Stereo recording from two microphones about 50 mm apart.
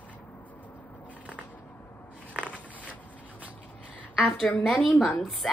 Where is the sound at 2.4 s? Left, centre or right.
Left.